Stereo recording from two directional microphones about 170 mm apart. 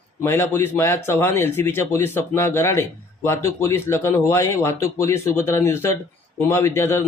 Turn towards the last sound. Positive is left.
turn(degrees=15)  # may be behind; listen again after turning